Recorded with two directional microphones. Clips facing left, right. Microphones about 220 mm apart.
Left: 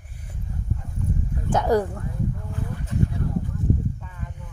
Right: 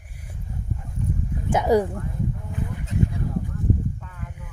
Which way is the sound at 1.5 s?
10° right (ahead or behind).